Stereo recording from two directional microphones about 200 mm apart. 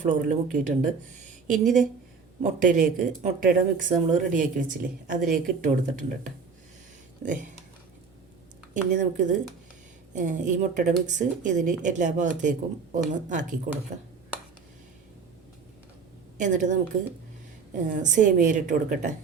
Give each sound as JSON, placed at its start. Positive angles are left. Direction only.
{"t": 0.0, "sound": "speech", "side_deg": -40}
{"t": 2.4, "sound": "speech", "side_deg": -40}
{"t": 7.2, "sound": "speech", "side_deg": -40}
{"t": 8.7, "sound": "speech", "side_deg": -40}
{"t": 16.4, "sound": "speech", "side_deg": -40}
{"t": 17.7, "sound": "speech", "side_deg": -40}